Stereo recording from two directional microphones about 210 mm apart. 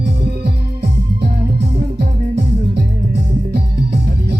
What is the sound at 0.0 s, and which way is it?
Music, 50° right (ahead or behind).